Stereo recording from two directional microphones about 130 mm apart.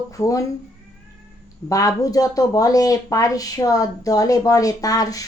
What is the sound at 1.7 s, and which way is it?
Speech, 25° left (ahead or behind).